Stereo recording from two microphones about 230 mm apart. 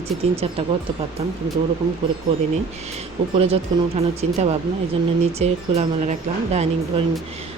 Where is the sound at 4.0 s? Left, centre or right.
Right.